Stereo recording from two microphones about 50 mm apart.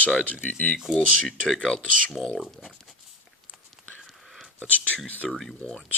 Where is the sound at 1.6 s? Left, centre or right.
Centre.